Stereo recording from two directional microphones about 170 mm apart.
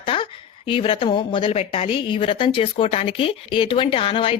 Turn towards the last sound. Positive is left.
turn(degrees=30)  # may be behind; listen again after turning